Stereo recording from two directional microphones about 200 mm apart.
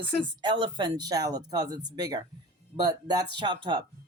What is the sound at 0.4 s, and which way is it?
Speech, 25° right (ahead or behind).